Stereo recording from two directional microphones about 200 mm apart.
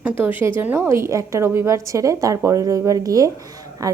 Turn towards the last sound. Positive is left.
turn(degrees=-15)  # may be behind; listen again after turning